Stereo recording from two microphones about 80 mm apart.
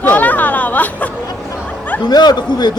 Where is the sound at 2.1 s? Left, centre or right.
Left.